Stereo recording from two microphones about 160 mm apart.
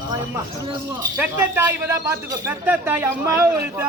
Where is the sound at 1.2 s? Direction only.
15° right (ahead or behind).